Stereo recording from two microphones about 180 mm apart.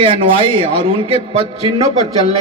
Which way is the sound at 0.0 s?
30° right (ahead or behind).